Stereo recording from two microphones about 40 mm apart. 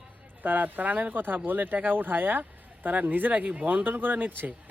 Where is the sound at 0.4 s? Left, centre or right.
Right.